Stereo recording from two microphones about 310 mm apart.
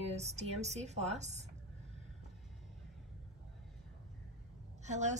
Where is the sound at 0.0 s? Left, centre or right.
Right.